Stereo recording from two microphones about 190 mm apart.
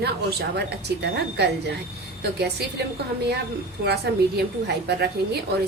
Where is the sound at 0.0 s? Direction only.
55° right (ahead or behind).